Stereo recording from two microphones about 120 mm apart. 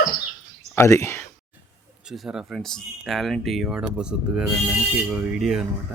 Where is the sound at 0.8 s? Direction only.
20° left (ahead or behind).